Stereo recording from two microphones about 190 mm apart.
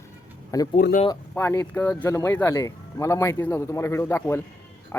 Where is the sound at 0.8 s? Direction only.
50° left (ahead or behind).